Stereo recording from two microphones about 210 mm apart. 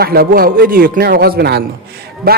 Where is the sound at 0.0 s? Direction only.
50° right (ahead or behind).